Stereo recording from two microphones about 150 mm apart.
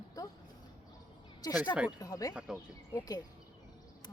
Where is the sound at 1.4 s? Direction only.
25° left (ahead or behind).